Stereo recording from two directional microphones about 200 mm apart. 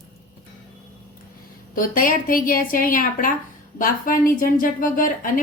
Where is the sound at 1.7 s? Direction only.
45° left (ahead or behind).